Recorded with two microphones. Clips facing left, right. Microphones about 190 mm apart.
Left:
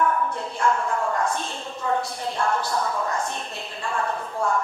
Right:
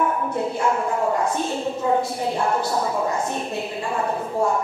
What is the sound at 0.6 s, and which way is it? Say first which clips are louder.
A woman's voice: left 1 dB; 10° right (ahead or behind).